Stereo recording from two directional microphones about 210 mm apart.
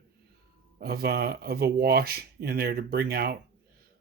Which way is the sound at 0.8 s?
50° right (ahead or behind).